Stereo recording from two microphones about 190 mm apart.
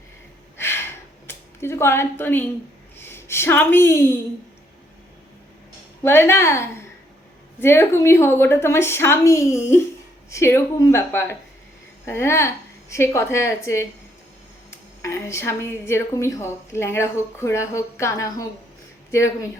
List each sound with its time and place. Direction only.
0.5 s a sound: 15° left (ahead or behind)
3.0 s speech: 10° left (ahead or behind)
6.0 s speech: 10° left (ahead or behind)